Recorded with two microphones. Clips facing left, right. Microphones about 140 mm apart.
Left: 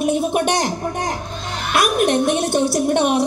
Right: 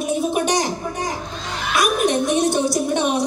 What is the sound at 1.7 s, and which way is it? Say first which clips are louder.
Speech: left 2 dB; 60° left (ahead or behind).